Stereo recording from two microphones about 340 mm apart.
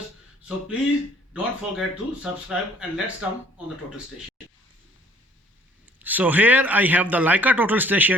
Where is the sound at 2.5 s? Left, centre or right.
Centre.